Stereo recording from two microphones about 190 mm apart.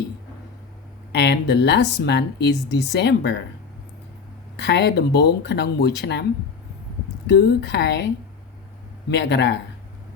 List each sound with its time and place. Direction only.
1.1 s speech: 60° left (ahead or behind)
4.5 s speech: 65° left (ahead or behind)
7.3 s speech: 60° left (ahead or behind)
9.0 s speech: 65° left (ahead or behind)